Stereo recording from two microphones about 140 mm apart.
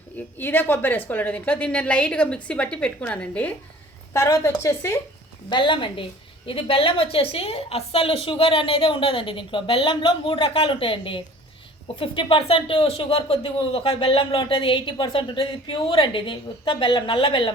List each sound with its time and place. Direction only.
0.3 s a woman's voice: 15° left (ahead or behind)
4.1 s a woman's voice: 20° left (ahead or behind)
5.5 s a woman's voice: 35° left (ahead or behind)